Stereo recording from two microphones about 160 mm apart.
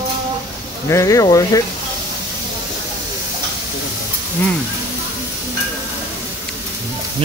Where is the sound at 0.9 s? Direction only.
20° left (ahead or behind).